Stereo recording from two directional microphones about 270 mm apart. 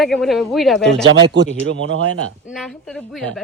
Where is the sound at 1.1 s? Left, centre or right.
Right.